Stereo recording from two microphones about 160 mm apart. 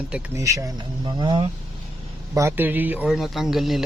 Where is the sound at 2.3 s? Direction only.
20° right (ahead or behind).